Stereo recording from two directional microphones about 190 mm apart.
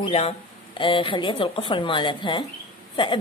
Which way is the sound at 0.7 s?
25° left (ahead or behind).